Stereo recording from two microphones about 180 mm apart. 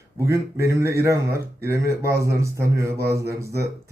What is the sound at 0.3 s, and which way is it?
Speech, 15° right (ahead or behind).